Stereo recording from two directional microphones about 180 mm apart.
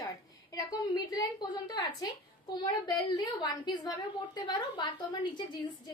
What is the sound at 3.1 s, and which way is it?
A woman's voice, 20° left (ahead or behind).